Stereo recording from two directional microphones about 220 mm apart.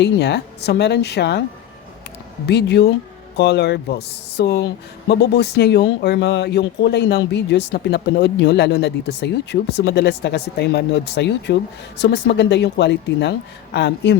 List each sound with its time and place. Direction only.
0.0 s speech: 50° left (ahead or behind)
2.5 s speech: 50° left (ahead or behind)